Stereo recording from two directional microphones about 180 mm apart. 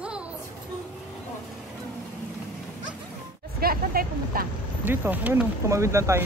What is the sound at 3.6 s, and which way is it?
Speech, 55° right (ahead or behind).